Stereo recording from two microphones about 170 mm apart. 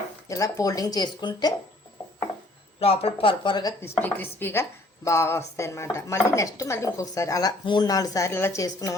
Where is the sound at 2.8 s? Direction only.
35° left (ahead or behind).